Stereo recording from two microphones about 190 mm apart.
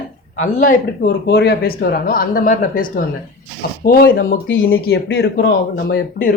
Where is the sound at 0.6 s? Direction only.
50° left (ahead or behind).